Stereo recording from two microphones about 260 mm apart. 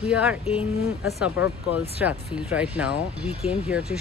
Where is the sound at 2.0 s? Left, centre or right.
Centre.